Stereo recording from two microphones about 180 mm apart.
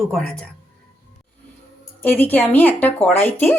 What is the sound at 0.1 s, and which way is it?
Speech, 5° left (ahead or behind).